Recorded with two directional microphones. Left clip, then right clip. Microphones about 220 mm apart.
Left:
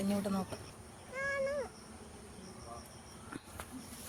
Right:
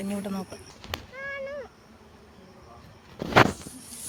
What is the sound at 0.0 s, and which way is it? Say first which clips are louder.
Speech: right 3 dB; 10° right (ahead or behind).